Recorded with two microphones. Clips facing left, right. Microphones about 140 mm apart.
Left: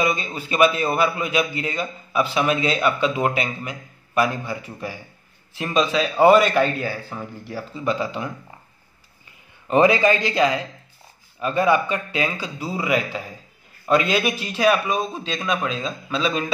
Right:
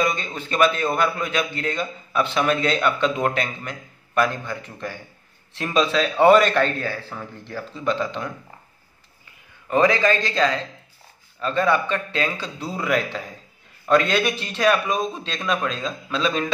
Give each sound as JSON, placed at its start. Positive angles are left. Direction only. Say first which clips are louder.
{"t": 0.0, "sound": "a man's voice", "louder": "left 1 dB", "side_deg": 5}
{"t": 9.7, "sound": "a man's voice", "louder": "left 2 dB", "side_deg": 20}